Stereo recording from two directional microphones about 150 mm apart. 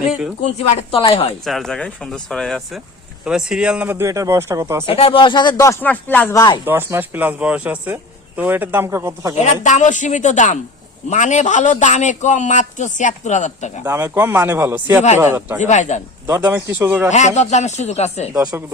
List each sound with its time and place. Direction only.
0.7 s speech: 35° left (ahead or behind)
1.5 s speech: centre (ahead or behind); by 4.9 s 20° right (ahead or behind)
4.9 s speech: 35° left (ahead or behind)
5.8 s speech: 10° left (ahead or behind)
6.3 s speech: 25° left (ahead or behind)
6.7 s speech: 15° right (ahead or behind)
9.4 s a woman's voice: 55° left (ahead or behind)
13.8 s speech: 15° right (ahead or behind)
15.6 s a man's voice: 50° left (ahead or behind)
16.2 s speech: 15° right (ahead or behind)
17.1 s a man's voice: 50° left (ahead or behind)
18.5 s speech: 15° right (ahead or behind)